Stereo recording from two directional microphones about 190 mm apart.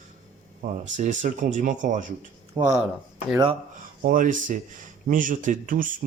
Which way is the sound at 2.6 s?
20° right (ahead or behind).